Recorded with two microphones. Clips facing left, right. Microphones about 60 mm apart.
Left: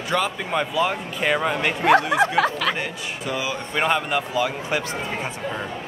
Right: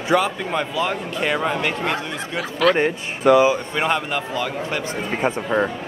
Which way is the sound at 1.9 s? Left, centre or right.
Left.